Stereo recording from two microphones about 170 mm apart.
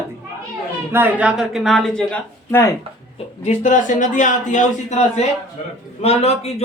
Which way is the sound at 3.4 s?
45° left (ahead or behind).